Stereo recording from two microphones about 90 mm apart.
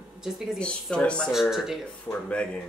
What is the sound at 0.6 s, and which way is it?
Speech, 10° left (ahead or behind).